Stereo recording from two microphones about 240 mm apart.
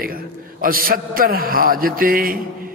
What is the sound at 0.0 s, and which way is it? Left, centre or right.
A man's voice, right.